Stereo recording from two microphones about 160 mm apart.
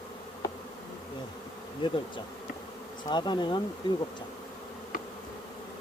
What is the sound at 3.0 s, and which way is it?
Speech, 30° left (ahead or behind).